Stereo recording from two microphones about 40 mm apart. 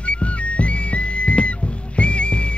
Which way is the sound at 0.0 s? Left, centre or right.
Left.